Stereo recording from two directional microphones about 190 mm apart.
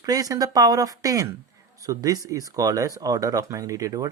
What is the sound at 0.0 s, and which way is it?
Speech, 20° right (ahead or behind).